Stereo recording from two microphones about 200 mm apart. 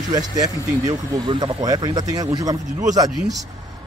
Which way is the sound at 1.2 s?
25° right (ahead or behind).